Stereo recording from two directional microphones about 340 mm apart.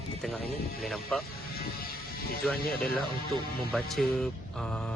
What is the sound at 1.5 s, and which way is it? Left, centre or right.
Music, left.